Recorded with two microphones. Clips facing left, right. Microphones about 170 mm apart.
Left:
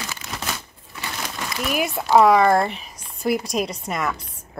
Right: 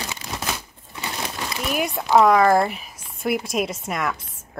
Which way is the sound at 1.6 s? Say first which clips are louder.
Left 1 dB; centre (ahead or behind).